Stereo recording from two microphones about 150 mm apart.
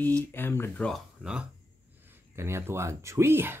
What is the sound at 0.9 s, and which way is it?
Speech, 5° right (ahead or behind).